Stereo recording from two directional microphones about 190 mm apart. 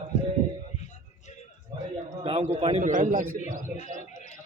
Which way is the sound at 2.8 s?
40° right (ahead or behind).